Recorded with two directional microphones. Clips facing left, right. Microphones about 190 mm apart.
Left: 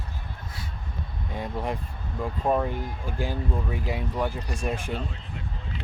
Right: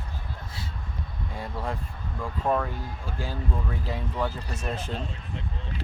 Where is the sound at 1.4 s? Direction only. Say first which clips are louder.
Left 3 dB; 20° left (ahead or behind).